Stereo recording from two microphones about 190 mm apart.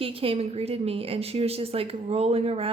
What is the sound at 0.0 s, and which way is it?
A woman's voice, 30° right (ahead or behind).